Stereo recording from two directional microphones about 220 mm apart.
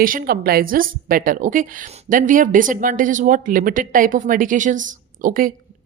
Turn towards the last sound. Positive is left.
turn(degrees=-40)  # may be behind; listen again after turning